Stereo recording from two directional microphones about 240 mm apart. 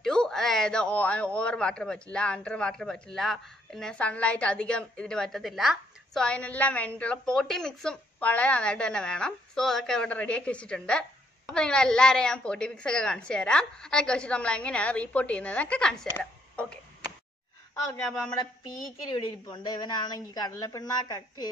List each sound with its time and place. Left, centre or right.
0.0 s a woman's voice: centre
17.8 s a woman's voice: centre
19.1 s speech: centre